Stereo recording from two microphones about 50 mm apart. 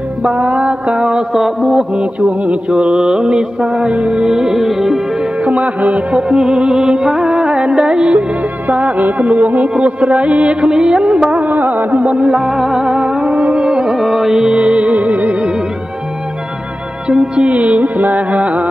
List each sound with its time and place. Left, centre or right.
0.6 s music: centre
1.3 s music: centre
5.4 s music: right
6.3 s music: centre
8.6 s music: right
10.7 s music: centre
11.5 s music: right
12.1 s music: right
17.4 s music: right